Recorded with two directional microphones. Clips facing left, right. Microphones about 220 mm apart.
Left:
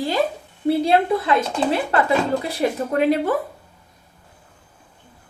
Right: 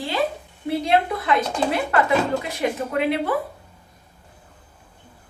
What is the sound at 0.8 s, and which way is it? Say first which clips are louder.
Speech: left 3 dB; 30° left (ahead or behind).